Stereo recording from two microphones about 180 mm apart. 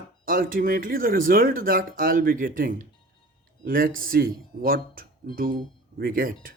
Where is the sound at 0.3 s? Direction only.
50° right (ahead or behind).